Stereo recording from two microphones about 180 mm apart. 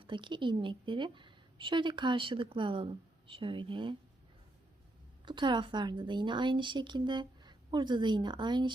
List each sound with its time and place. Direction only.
0.0 s a woman's voice: 30° right (ahead or behind)
5.2 s a woman's voice: 25° right (ahead or behind)